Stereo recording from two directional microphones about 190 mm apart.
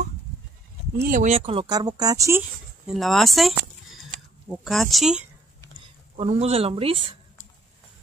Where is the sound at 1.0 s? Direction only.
40° right (ahead or behind); by 2.9 s 15° right (ahead or behind).